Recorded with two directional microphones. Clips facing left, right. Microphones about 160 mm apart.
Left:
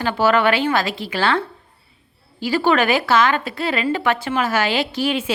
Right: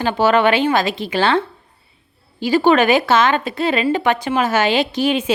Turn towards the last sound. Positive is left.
turn(degrees=-20)  # may be behind; listen again after turning